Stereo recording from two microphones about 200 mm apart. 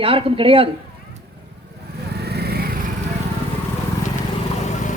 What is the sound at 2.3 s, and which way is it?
Lawn mower, 55° right (ahead or behind).